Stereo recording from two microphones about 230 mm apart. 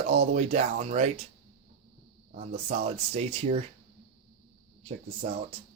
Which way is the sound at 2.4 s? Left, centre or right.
Right.